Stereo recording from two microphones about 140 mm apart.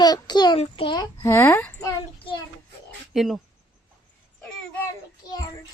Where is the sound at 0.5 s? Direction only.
40° left (ahead or behind).